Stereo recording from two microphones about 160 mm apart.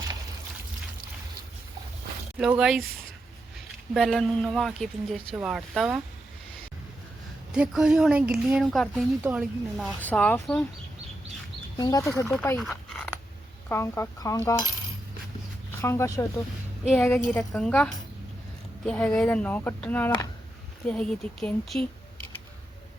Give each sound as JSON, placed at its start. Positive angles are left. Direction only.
{"t": 2.4, "sound": "speech", "side_deg": -5}
{"t": 3.9, "sound": "speech", "side_deg": 0}
{"t": 7.5, "sound": "speech", "side_deg": -5}
{"t": 10.0, "sound": "speech", "side_deg": 10}
{"t": 11.8, "sound": "speech", "side_deg": 20}
{"t": 12.3, "sound": "speech", "side_deg": 5}
{"t": 13.7, "sound": "speech", "side_deg": 15}
{"t": 15.8, "sound": "speech", "side_deg": 15}
{"t": 17.0, "sound": "speech", "side_deg": 5}